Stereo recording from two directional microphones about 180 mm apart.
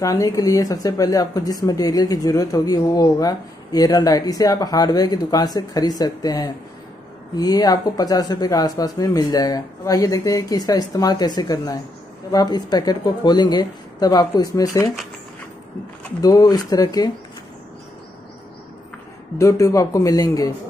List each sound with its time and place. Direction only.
0.0 s speech: 20° left (ahead or behind)
16.2 s speech: 20° left (ahead or behind)
19.3 s speech: 20° left (ahead or behind)